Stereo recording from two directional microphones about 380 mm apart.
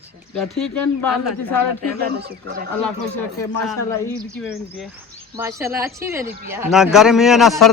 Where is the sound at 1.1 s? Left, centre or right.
Left.